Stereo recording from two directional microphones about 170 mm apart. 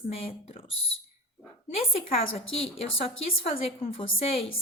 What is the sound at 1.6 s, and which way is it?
A woman's voice, 35° left (ahead or behind).